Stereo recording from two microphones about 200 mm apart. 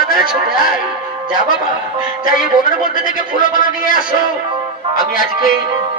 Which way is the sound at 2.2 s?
45° left (ahead or behind).